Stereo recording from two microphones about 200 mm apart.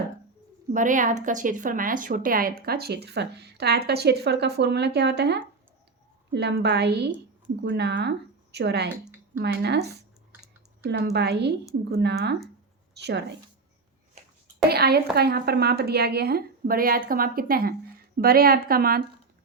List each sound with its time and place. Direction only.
0.7 s a woman's voice: 40° right (ahead or behind); by 13.2 s 55° right (ahead or behind)
14.2 s a sound: 35° right (ahead or behind)
14.7 s speech: 50° right (ahead or behind)